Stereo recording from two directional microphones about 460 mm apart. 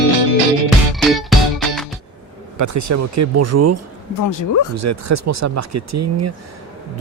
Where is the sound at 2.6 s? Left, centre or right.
Right.